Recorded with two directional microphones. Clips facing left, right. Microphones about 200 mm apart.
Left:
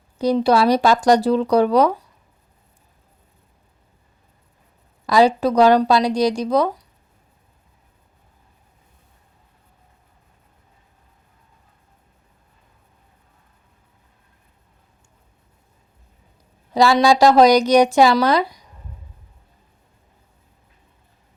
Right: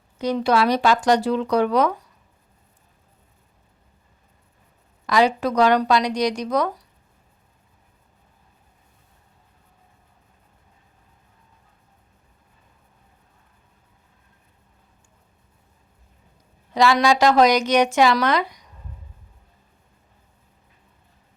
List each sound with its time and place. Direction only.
0.2 s speech: 35° left (ahead or behind)
5.0 s speech: 35° left (ahead or behind)
16.7 s speech: 35° left (ahead or behind)